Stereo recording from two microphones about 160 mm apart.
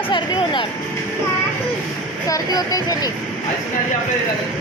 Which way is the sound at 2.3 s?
20° left (ahead or behind).